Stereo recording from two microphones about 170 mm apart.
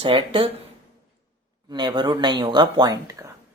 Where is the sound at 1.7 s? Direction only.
25° right (ahead or behind).